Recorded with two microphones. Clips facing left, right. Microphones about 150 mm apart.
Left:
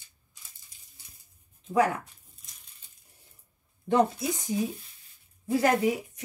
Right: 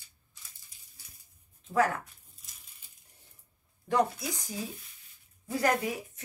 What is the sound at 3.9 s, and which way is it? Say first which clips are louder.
Speech: left 4 dB; 25° left (ahead or behind).